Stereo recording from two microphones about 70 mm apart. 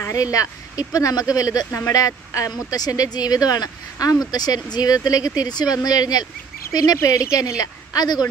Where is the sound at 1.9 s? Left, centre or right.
Left.